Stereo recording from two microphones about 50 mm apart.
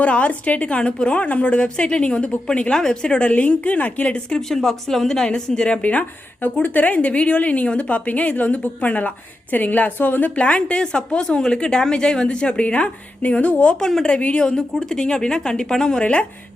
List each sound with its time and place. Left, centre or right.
0.0 s a woman's voice: left
4.4 s a woman's voice: centre